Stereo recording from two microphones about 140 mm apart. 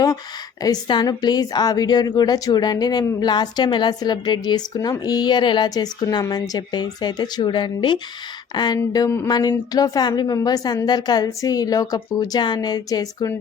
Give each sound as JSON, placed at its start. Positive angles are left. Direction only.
{"t": 0.6, "sound": "a woman's voice", "side_deg": 30}